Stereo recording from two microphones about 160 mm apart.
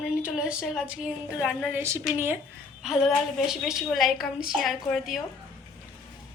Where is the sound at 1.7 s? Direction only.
15° right (ahead or behind).